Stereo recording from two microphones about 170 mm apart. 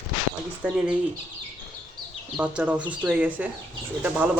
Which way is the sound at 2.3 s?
5° right (ahead or behind).